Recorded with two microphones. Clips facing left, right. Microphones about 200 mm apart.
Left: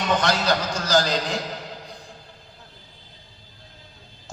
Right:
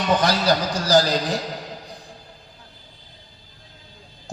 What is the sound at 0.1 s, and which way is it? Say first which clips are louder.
A man's voice: right 3 dB; 35° right (ahead or behind).